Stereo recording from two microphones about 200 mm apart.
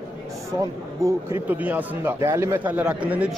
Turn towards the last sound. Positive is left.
turn(degrees=-5)  # may be behind; listen again after turning